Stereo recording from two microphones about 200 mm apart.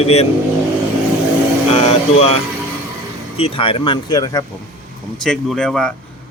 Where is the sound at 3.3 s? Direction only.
30° left (ahead or behind).